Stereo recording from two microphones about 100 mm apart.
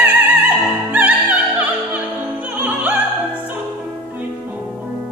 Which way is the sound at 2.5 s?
15° right (ahead or behind).